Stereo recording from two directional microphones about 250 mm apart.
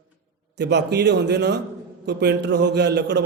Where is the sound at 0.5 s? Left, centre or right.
Right.